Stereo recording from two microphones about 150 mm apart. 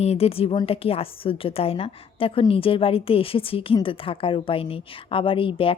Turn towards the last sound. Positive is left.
turn(degrees=35)  # may be behind; listen again after turning